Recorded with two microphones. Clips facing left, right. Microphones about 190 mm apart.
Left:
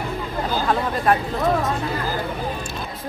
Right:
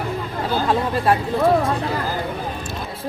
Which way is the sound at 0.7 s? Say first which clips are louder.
Right 1 dB; 30° right (ahead or behind).